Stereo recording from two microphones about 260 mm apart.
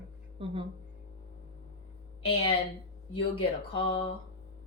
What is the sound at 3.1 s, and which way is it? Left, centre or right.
Speech, left.